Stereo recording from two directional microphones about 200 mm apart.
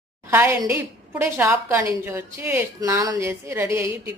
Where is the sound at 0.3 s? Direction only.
10° right (ahead or behind).